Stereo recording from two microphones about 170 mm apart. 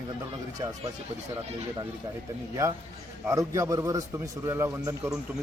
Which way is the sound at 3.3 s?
15° right (ahead or behind).